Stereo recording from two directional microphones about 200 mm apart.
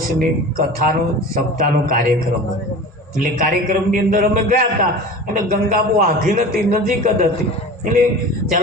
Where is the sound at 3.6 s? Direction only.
45° right (ahead or behind).